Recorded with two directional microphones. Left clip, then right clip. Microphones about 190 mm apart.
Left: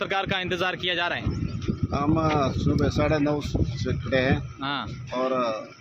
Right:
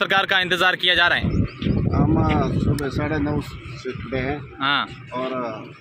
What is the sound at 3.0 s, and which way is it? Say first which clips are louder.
Speech: left 2 dB; 30° left (ahead or behind).